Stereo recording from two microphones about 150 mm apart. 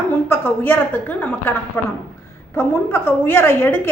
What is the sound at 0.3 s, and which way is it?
A woman's voice, 15° left (ahead or behind).